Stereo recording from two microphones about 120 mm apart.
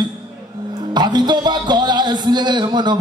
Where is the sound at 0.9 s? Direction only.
35° right (ahead or behind).